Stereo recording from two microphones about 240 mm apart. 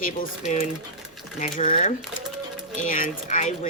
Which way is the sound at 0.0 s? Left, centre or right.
Left.